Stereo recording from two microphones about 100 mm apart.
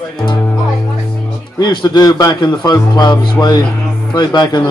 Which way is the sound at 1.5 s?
45° left (ahead or behind).